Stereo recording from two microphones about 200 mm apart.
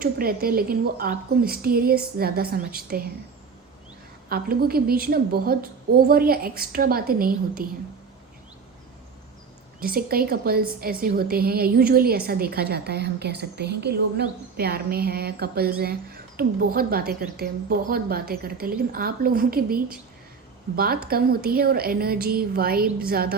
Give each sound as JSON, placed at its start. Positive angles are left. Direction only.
{"t": 0.0, "sound": "a woman's voice", "side_deg": -50}
{"t": 4.3, "sound": "a woman's voice", "side_deg": -50}
{"t": 9.8, "sound": "a woman's voice", "side_deg": -50}